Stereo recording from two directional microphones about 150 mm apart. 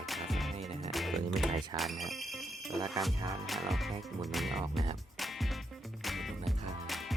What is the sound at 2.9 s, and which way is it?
Music, centre (ahead or behind).